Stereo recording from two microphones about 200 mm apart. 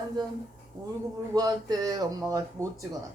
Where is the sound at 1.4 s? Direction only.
20° right (ahead or behind).